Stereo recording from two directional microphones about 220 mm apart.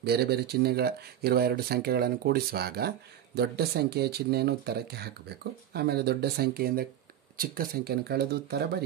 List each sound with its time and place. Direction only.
0.0 s speech: 45° right (ahead or behind)